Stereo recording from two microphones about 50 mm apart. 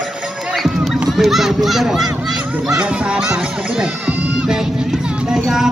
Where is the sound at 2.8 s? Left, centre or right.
Right.